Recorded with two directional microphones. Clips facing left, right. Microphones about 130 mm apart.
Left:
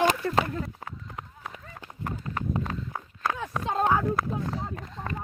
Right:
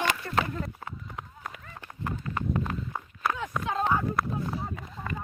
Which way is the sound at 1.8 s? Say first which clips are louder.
Even; 15° left (ahead or behind).